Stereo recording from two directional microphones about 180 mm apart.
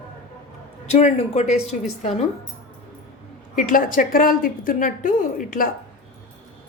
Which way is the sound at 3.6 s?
50° left (ahead or behind).